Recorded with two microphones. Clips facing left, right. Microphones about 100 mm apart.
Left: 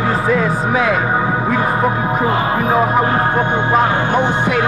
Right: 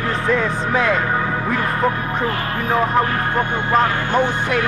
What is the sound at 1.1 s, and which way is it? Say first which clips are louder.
Music: left 4 dB; 20° left (ahead or behind).